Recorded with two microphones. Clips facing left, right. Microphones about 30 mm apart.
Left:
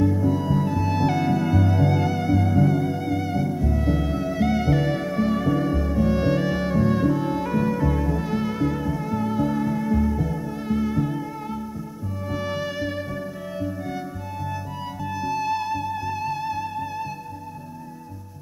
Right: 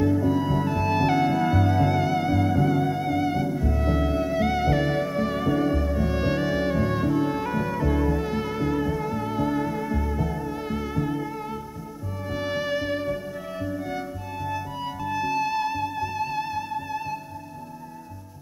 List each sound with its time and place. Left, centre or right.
0.0 s music: centre